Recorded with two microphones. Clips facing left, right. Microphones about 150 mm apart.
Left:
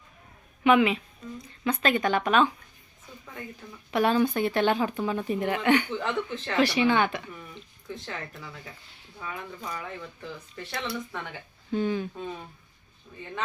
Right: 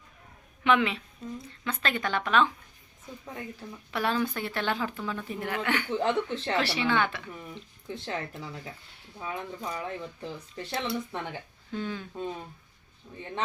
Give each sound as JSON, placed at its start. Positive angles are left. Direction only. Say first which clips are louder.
{"t": 0.6, "sound": "a woman's voice", "louder": "left 4 dB", "side_deg": 10}
{"t": 3.9, "sound": "speech", "louder": "left 6 dB", "side_deg": 20}
{"t": 5.9, "sound": "speech", "louder": "right 3 dB", "side_deg": -35}
{"t": 6.6, "sound": "speech", "louder": "left 6 dB", "side_deg": 15}
{"t": 7.5, "sound": "speech", "louder": "right 1 dB", "side_deg": -25}
{"t": 11.7, "sound": "speech", "louder": "left 7 dB", "side_deg": 15}